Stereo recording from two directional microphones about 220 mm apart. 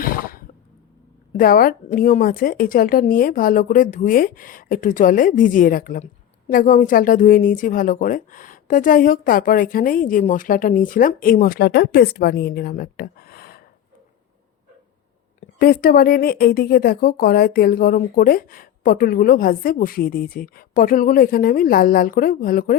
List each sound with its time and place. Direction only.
0.0 s cough: 40° left (ahead or behind)
1.4 s speech: 40° left (ahead or behind)
15.4 s speech: 40° left (ahead or behind)